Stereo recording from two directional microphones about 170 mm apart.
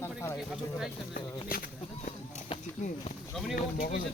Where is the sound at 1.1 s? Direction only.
60° left (ahead or behind).